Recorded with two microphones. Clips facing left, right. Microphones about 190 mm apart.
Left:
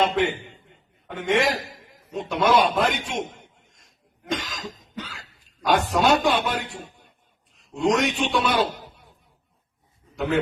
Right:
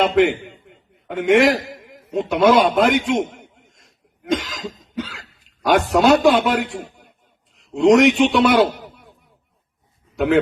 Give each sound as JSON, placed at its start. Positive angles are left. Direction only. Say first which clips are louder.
{"t": 0.0, "sound": "a man's voice", "louder": "right 6 dB", "side_deg": -70}
{"t": 3.2, "sound": "cough", "louder": "right 4 dB", "side_deg": -80}
{"t": 4.9, "sound": "cough", "louder": "right 10 dB", "side_deg": -75}
{"t": 5.6, "sound": "a man's voice", "louder": "right 5 dB", "side_deg": -80}
{"t": 7.8, "sound": "a man's voice", "louder": "right 9 dB", "side_deg": -85}